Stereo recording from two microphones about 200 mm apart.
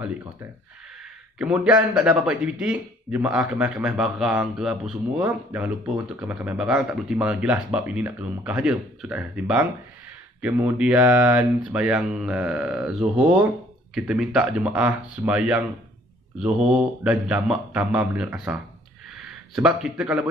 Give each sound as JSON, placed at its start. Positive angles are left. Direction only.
{"t": 1.4, "sound": "a man's voice", "side_deg": -5}